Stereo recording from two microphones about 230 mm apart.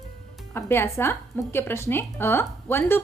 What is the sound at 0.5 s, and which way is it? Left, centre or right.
A woman's voice, centre.